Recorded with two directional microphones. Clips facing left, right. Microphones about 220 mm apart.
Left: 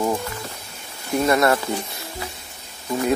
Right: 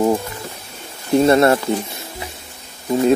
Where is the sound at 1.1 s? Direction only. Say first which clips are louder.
Right 6 dB; 30° right (ahead or behind).